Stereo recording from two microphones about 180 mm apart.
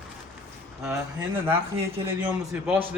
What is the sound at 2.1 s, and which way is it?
Speech, 15° right (ahead or behind).